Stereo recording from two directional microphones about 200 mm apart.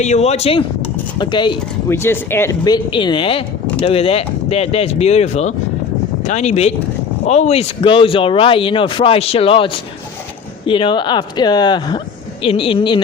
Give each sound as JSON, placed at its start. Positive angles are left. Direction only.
{"t": 0.0, "sound": "speech", "side_deg": 35}
{"t": 1.9, "sound": "speech", "side_deg": 10}